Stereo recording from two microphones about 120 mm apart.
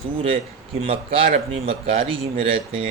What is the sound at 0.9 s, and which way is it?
Speech, 50° right (ahead or behind).